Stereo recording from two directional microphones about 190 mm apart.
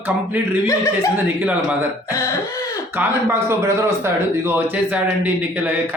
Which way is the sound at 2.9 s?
15° right (ahead or behind).